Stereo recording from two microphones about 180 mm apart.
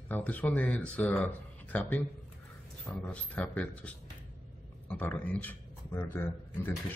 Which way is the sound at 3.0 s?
5° left (ahead or behind).